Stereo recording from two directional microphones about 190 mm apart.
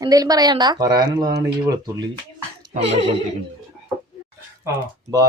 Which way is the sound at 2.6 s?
30° right (ahead or behind).